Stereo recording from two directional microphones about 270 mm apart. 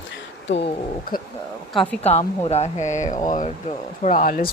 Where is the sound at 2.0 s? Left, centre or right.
Left.